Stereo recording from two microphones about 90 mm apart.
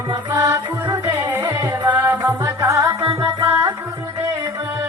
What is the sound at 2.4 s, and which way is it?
Music, 40° right (ahead or behind).